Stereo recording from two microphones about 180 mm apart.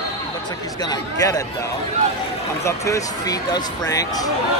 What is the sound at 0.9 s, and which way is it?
Speech, 20° left (ahead or behind).